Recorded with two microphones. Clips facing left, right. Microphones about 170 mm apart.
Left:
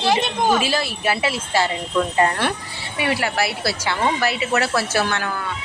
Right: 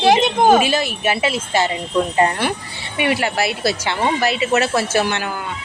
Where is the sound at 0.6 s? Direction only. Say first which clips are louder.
Right 3 dB; 20° right (ahead or behind).